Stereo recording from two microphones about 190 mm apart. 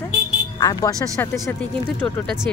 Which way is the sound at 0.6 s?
20° left (ahead or behind).